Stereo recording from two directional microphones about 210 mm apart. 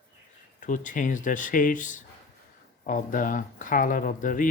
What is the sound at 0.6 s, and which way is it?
Speech, 35° left (ahead or behind).